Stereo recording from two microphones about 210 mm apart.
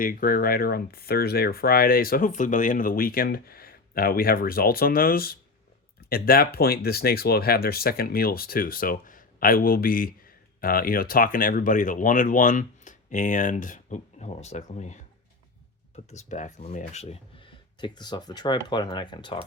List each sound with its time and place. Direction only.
0.0 s speech: 45° left (ahead or behind)
16.1 s speech: 35° left (ahead or behind)